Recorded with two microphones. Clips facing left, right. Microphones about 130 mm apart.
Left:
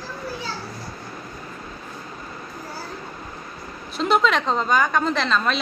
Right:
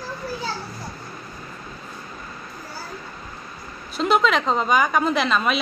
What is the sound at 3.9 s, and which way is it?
A woman's voice, centre (ahead or behind).